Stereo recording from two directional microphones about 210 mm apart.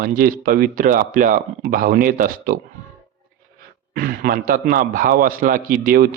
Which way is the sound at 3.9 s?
45° right (ahead or behind).